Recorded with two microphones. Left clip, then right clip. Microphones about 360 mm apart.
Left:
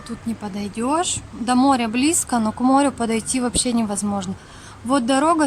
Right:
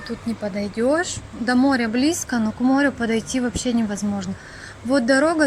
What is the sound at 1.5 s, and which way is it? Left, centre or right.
Speech, left.